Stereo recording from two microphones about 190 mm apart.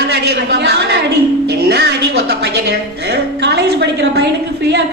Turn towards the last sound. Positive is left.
turn(degrees=-60)  # may be behind; listen again after turning